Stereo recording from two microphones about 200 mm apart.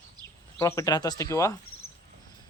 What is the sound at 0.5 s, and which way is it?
A man's voice, 15° left (ahead or behind).